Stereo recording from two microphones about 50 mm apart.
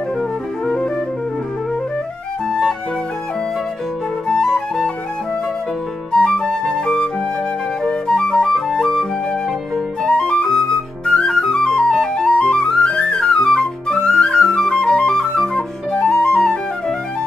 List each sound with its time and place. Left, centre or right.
4.6 s flute: centre
6.1 s music: centre
7.8 s flute: centre
8.7 s flute: centre
10.0 s flute: left